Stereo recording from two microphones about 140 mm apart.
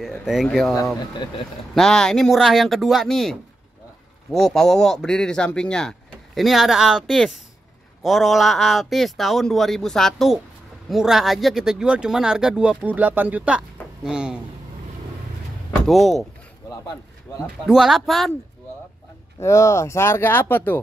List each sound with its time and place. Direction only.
0.2 s speech: 5° right (ahead or behind)
0.9 s speech: 30° left (ahead or behind)
1.8 s speech: 5° left (ahead or behind)
15.9 s speech: centre (ahead or behind)
17.4 s speech: 5° right (ahead or behind)
19.4 s speech: 20° left (ahead or behind)